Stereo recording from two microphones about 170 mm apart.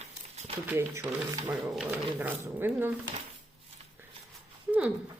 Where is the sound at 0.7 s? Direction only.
10° right (ahead or behind).